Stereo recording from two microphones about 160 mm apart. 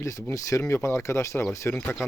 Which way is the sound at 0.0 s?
20° left (ahead or behind).